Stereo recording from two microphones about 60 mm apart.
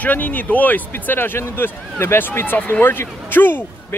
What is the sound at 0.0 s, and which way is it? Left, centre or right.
Speech, left.